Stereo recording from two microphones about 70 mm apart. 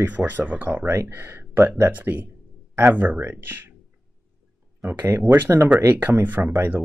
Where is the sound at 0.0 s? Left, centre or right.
Right.